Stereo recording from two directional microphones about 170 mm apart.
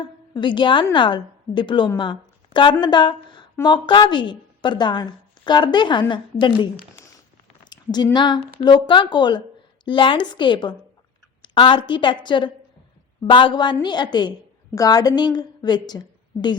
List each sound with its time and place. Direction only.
0.0 s a woman's voice: 25° left (ahead or behind)
2.0 s a sound: 30° left (ahead or behind)
2.8 s a woman's voice: 25° left (ahead or behind)